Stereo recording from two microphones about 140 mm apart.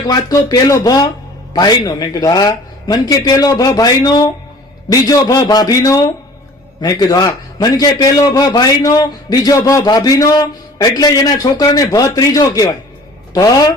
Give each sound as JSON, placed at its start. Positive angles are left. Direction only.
{"t": 0.1, "sound": "a man's voice", "side_deg": 30}